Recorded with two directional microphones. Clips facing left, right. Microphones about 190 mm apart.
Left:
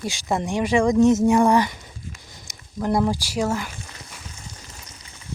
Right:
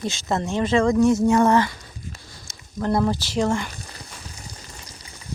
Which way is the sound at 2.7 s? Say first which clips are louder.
Even; 10° left (ahead or behind).